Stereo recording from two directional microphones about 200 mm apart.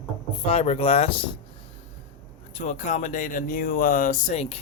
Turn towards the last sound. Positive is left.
turn(degrees=35)  # may be behind; listen again after turning